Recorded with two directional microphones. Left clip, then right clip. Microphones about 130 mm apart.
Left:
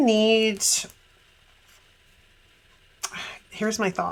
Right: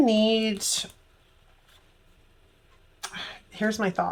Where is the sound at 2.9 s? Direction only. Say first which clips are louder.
Left 2 dB; 60° left (ahead or behind).